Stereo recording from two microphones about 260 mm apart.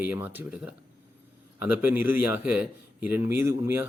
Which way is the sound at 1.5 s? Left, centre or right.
Left.